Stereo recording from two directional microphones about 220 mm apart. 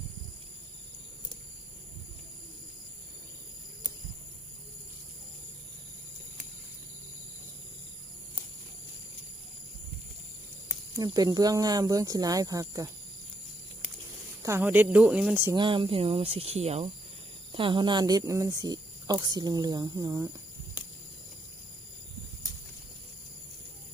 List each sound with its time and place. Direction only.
10.9 s speech: 20° right (ahead or behind)
14.4 s speech: 10° right (ahead or behind)
15.5 s speech: 20° right (ahead or behind)